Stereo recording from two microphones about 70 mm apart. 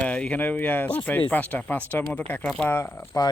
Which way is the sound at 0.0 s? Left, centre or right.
Centre.